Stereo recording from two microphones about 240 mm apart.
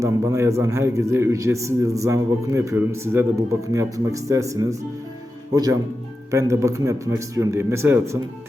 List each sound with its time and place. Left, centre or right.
0.0 s a man's voice: centre